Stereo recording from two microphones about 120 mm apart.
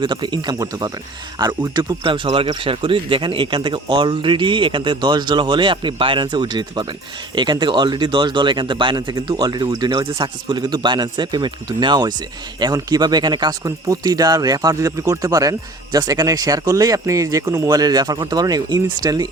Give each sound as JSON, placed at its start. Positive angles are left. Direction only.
{"t": 0.0, "sound": "speech", "side_deg": -40}